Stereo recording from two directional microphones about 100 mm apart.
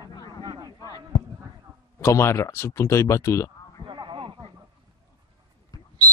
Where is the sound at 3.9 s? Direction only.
55° right (ahead or behind).